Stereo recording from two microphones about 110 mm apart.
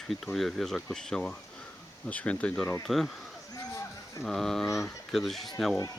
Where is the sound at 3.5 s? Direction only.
30° left (ahead or behind).